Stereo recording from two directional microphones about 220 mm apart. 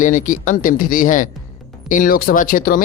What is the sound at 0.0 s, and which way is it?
Speech, 35° left (ahead or behind).